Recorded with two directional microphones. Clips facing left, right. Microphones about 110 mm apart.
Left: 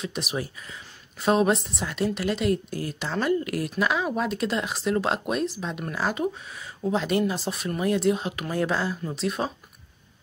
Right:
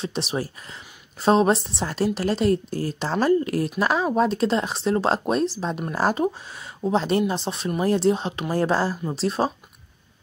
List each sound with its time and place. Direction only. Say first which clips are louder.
0.0 s speech: right 3 dB; 30° right (ahead or behind)